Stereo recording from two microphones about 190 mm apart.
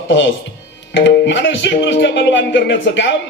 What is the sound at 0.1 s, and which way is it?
Speech, 70° left (ahead or behind).